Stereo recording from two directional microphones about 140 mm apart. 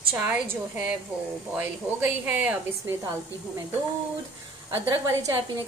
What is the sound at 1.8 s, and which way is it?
A woman's voice, 15° right (ahead or behind).